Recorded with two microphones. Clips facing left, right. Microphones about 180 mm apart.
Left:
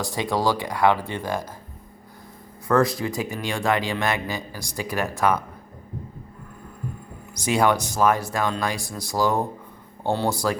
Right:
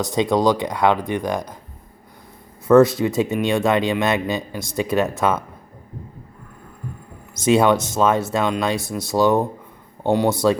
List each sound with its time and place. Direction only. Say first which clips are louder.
0.0 s speech: right 6 dB; 20° right (ahead or behind)
2.6 s speech: right 8 dB; 25° right (ahead or behind)
7.3 s speech: right 5 dB; 25° right (ahead or behind)